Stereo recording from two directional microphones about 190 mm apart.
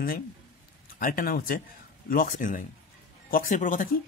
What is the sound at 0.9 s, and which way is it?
Speech, 50° left (ahead or behind).